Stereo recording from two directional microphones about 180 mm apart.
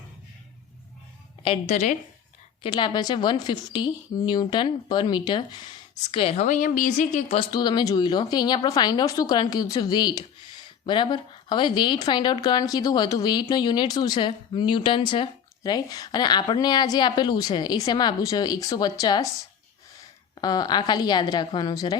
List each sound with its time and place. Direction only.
1.5 s a woman's voice: 40° left (ahead or behind)
2.6 s a woman's voice: 25° left (ahead or behind); by 7.3 s 40° left (ahead or behind)
7.3 s a woman's voice: 25° left (ahead or behind)
20.4 s a woman's voice: 20° left (ahead or behind)